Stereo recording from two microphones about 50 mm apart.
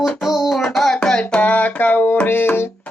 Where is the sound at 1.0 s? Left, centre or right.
Left.